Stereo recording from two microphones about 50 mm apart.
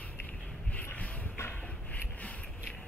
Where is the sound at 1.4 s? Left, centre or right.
Left.